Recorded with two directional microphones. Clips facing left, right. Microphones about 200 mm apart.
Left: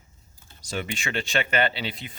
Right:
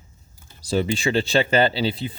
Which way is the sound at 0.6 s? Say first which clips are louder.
Right 10 dB; 35° right (ahead or behind).